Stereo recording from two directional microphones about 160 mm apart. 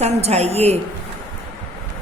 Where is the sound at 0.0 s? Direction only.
40° right (ahead or behind).